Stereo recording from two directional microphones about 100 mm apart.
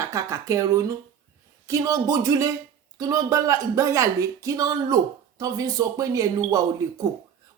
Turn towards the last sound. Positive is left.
turn(degrees=-35)  # may be behind; listen again after turning